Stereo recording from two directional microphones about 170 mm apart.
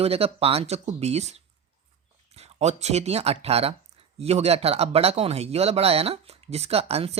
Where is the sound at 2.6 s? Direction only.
40° right (ahead or behind).